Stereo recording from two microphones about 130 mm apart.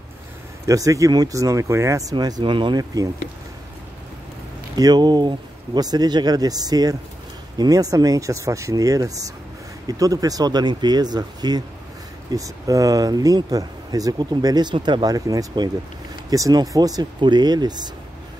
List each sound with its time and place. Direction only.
0.7 s speech: 25° right (ahead or behind)
4.7 s speech: 30° right (ahead or behind)